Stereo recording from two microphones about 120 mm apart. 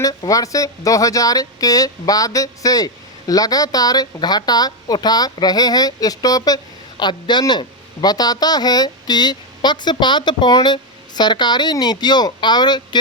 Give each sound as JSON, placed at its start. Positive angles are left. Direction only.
{"t": 0.0, "sound": "speech", "side_deg": 30}